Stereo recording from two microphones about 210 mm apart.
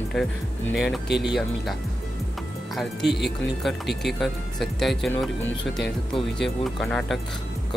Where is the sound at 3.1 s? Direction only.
50° left (ahead or behind).